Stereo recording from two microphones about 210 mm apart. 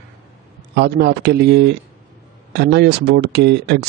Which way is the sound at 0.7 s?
50° right (ahead or behind).